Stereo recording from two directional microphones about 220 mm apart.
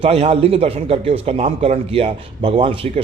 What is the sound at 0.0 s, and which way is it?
Speech, 25° right (ahead or behind).